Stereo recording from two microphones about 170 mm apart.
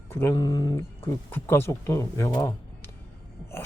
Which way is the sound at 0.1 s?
15° left (ahead or behind).